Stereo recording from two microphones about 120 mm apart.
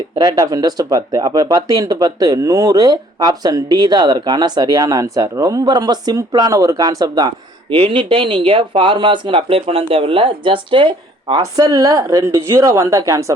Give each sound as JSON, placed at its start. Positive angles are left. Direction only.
{"t": 0.2, "sound": "speech", "side_deg": -35}
{"t": 7.8, "sound": "speech", "side_deg": -45}
{"t": 11.5, "sound": "a woman's voice", "side_deg": -30}